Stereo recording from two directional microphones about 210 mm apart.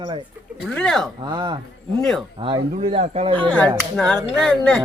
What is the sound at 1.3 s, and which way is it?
Speech, 20° right (ahead or behind).